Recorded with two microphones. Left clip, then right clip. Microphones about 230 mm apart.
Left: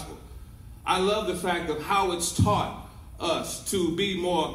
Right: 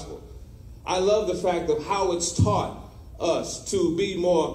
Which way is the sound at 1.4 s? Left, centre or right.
Left.